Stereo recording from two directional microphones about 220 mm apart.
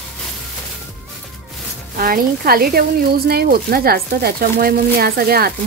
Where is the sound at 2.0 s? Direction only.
40° right (ahead or behind).